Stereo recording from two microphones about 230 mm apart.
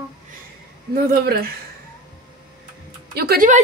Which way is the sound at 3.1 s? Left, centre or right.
Right.